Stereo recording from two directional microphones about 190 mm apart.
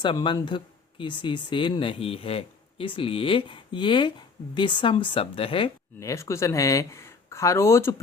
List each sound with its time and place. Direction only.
0.0 s speech: 25° left (ahead or behind)
6.0 s speech: 15° left (ahead or behind)